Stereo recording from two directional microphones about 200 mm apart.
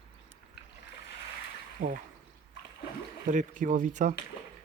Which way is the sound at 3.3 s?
40° right (ahead or behind).